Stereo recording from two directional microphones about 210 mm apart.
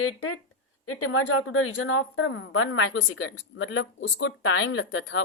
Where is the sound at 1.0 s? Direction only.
75° left (ahead or behind).